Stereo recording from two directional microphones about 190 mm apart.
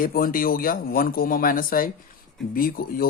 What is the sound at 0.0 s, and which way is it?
Speech, 50° left (ahead or behind).